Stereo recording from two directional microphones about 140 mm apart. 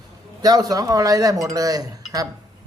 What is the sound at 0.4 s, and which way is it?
A man's voice, 25° right (ahead or behind).